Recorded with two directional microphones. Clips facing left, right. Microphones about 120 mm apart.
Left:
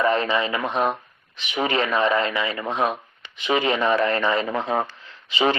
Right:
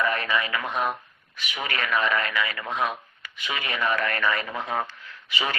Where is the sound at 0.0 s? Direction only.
25° left (ahead or behind).